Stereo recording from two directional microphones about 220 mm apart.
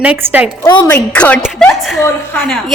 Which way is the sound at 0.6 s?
15° left (ahead or behind).